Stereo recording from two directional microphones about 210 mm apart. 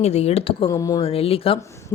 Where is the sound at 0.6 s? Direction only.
15° left (ahead or behind).